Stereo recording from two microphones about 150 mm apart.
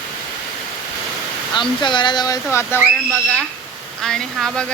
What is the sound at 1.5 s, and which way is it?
Speech, 30° left (ahead or behind).